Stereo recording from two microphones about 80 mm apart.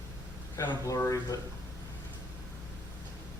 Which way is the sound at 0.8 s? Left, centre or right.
Left.